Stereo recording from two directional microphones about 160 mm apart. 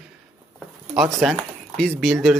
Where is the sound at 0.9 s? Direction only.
Centre (ahead or behind).